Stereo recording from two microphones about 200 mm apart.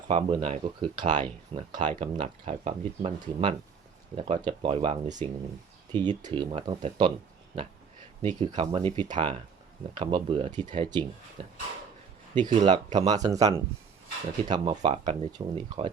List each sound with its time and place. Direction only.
0.1 s speech: 30° right (ahead or behind)
5.9 s speech: 25° right (ahead or behind)
8.2 s speech: 30° right (ahead or behind)